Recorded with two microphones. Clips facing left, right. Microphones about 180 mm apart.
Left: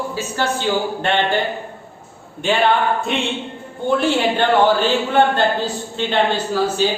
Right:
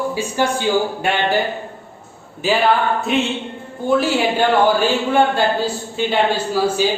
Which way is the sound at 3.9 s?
5° right (ahead or behind).